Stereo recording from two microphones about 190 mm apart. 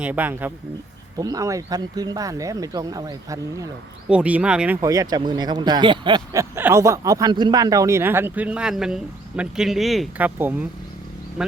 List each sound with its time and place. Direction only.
0.0 s speech: 10° right (ahead or behind)
4.1 s speech: 5° right (ahead or behind)
4.8 s speech: 20° right (ahead or behind); by 11.5 s 5° right (ahead or behind)